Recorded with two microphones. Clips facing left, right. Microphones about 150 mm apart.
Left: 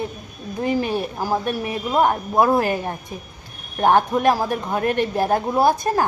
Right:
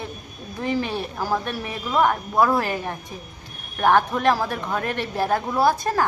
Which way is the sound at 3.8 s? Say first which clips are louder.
Left 2 dB; 15° left (ahead or behind).